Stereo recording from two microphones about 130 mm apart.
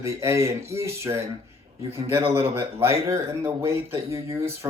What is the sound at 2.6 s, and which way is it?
Speech, 20° right (ahead or behind).